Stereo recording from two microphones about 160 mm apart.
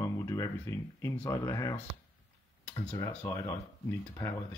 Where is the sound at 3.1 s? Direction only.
20° left (ahead or behind).